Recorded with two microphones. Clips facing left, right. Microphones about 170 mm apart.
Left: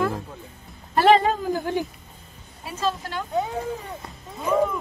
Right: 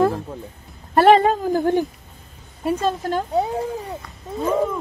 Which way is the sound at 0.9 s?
55° right (ahead or behind).